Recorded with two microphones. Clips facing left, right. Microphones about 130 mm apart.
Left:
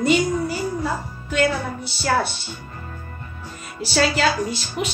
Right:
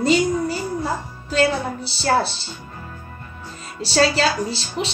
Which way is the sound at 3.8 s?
30° right (ahead or behind).